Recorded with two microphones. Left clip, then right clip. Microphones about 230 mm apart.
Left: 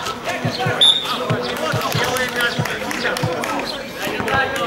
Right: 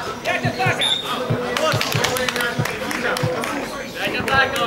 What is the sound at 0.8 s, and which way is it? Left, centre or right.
Basketball bounce, centre.